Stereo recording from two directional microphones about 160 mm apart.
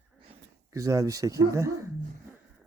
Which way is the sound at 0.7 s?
20° right (ahead or behind).